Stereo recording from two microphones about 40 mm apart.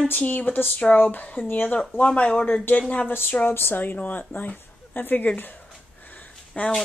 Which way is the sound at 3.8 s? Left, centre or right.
Left.